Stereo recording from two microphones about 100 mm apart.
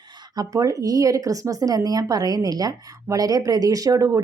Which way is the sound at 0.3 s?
35° right (ahead or behind).